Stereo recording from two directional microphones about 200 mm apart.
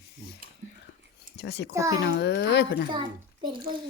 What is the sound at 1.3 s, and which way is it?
Speech, 55° left (ahead or behind).